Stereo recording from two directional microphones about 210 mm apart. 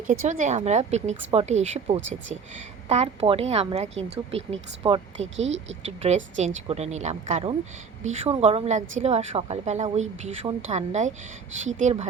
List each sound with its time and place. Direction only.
0.1 s a woman's voice: 35° right (ahead or behind)
5.4 s speech: 65° right (ahead or behind)
6.0 s a woman's voice: 35° right (ahead or behind)